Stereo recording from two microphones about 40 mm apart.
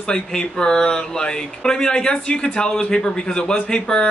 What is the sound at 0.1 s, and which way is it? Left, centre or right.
Speech, left.